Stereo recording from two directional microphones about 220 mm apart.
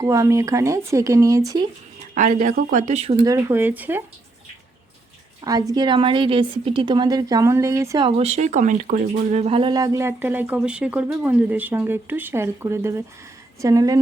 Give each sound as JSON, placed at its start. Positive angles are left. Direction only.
{"t": 0.0, "sound": "a woman's voice", "side_deg": -15}
{"t": 2.1, "sound": "speech", "side_deg": -35}
{"t": 3.2, "sound": "a woman's voice", "side_deg": -15}
{"t": 5.4, "sound": "a woman's voice", "side_deg": -15}